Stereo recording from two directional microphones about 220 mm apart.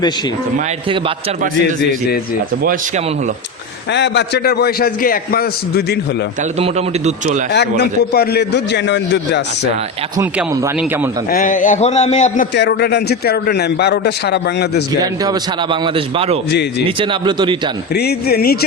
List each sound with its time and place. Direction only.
3.9 s a man's voice: 50° left (ahead or behind)
6.6 s a man's voice: 30° right (ahead or behind)
7.5 s a man's voice: 50° left (ahead or behind)
11.3 s a man's voice: 40° left (ahead or behind)
12.5 s a man's voice: 50° left (ahead or behind)
15.2 s a man's voice: 20° right (ahead or behind)
17.9 s a man's voice: 45° left (ahead or behind)